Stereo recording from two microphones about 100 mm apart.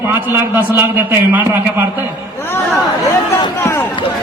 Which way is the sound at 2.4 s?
20° left (ahead or behind).